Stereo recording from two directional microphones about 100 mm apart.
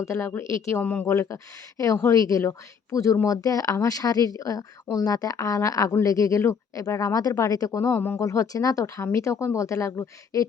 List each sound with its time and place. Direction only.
0.0 s speech: 30° left (ahead or behind)
7.8 s speech: 25° left (ahead or behind)